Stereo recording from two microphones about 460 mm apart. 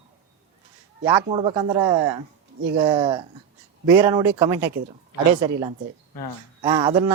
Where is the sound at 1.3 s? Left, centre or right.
Centre.